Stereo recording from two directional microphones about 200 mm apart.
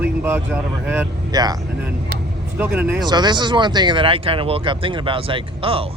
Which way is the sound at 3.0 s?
20° right (ahead or behind).